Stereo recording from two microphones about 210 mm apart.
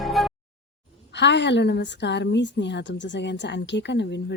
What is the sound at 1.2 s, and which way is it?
A woman's voice, 55° left (ahead or behind).